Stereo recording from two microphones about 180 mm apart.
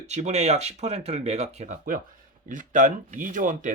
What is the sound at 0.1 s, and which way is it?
Speech, 40° right (ahead or behind).